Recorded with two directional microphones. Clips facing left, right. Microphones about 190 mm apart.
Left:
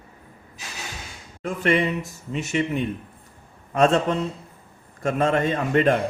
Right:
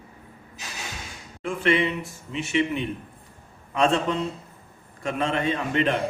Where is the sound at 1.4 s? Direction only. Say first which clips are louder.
Left 1 dB; 40° left (ahead or behind).